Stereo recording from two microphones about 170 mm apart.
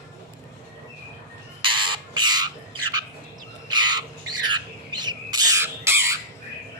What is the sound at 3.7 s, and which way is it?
Squawk, 25° right (ahead or behind).